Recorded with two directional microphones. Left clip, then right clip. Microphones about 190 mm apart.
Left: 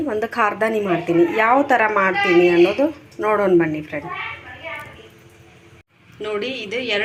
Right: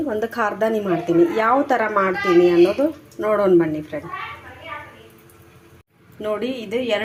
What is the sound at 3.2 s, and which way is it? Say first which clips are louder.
Speech: even; centre (ahead or behind).